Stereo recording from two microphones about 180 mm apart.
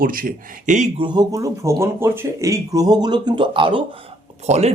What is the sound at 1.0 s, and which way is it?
Speech, 25° right (ahead or behind).